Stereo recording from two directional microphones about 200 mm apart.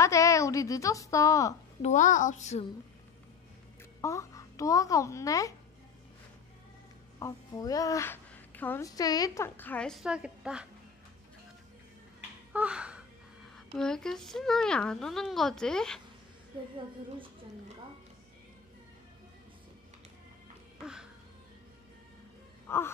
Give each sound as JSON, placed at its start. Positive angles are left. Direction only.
{"t": 0.0, "sound": "a woman's voice", "side_deg": 15}
{"t": 1.8, "sound": "a child's voice", "side_deg": 35}
{"t": 4.0, "sound": "a child's voice", "side_deg": 15}
{"t": 7.2, "sound": "a woman's voice", "side_deg": 15}
{"t": 12.5, "sound": "a sound", "side_deg": -5}
{"t": 13.7, "sound": "a child's voice", "side_deg": 5}
{"t": 20.8, "sound": "a sound", "side_deg": -5}
{"t": 22.7, "sound": "wail", "side_deg": 10}